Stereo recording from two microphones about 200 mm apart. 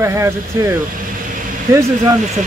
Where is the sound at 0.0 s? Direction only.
15° right (ahead or behind).